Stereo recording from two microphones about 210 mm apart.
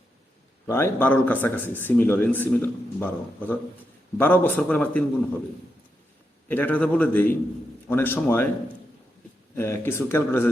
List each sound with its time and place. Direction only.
0.7 s a man's voice: 10° left (ahead or behind)
6.5 s a man's voice: 10° left (ahead or behind)
9.6 s a man's voice: 10° left (ahead or behind)